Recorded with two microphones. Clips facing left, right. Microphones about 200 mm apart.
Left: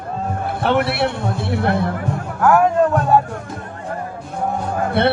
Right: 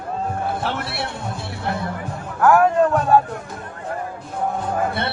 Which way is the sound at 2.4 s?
5° left (ahead or behind).